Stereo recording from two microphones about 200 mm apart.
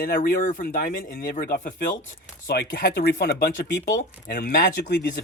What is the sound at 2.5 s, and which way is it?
Speech, 55° left (ahead or behind).